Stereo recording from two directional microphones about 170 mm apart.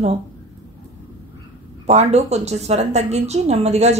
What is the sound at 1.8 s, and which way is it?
A woman's voice, 40° right (ahead or behind).